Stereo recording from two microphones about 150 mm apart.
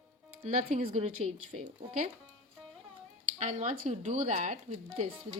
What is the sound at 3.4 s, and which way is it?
Speech, 50° right (ahead or behind).